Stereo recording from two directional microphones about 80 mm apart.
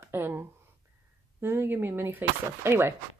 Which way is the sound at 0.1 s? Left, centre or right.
Right.